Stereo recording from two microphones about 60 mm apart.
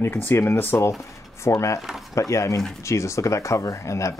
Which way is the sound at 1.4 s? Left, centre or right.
Left.